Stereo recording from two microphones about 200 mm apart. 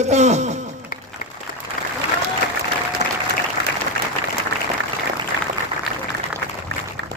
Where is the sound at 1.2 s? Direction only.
50° left (ahead or behind).